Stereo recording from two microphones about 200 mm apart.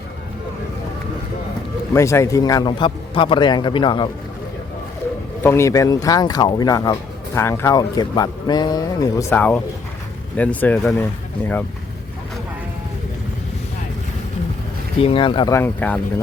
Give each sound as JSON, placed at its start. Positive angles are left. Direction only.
{"t": 1.9, "sound": "speech", "side_deg": 15}
{"t": 5.4, "sound": "speech", "side_deg": 10}
{"t": 15.0, "sound": "speech", "side_deg": 25}
{"t": 15.5, "sound": "speech", "side_deg": 10}